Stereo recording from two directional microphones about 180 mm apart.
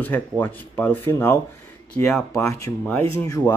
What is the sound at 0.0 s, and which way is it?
Speech, 10° left (ahead or behind).